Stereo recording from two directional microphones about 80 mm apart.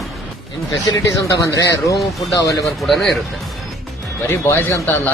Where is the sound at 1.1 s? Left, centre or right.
Left.